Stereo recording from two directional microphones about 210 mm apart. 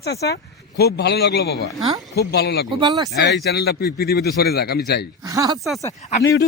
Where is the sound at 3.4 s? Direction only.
50° left (ahead or behind).